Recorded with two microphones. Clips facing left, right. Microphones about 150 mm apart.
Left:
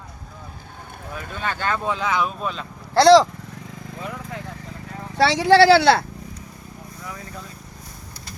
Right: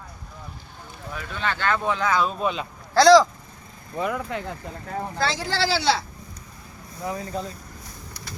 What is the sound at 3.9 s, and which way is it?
Speech, 85° right.